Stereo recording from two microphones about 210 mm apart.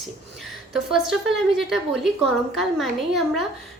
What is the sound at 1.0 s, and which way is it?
A woman's voice, centre (ahead or behind).